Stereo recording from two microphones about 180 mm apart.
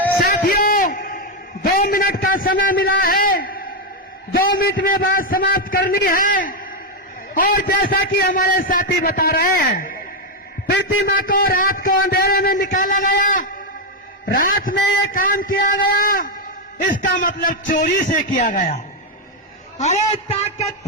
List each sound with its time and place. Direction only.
0.2 s a sound: 55° left (ahead or behind)
4.4 s a man's voice: 55° left (ahead or behind)
10.7 s a man's voice: 65° left (ahead or behind); by 18.8 s 40° left (ahead or behind)
19.8 s a man's voice: 35° left (ahead or behind)